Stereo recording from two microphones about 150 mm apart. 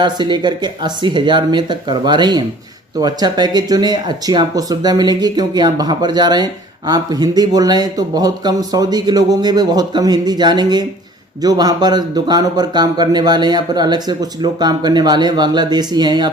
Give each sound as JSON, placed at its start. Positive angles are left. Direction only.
{"t": 0.0, "sound": "speech", "side_deg": -30}